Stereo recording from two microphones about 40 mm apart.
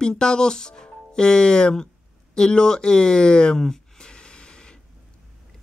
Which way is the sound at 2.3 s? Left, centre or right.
Centre.